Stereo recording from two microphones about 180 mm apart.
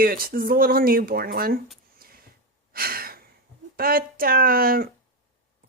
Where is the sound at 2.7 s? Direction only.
55° right (ahead or behind).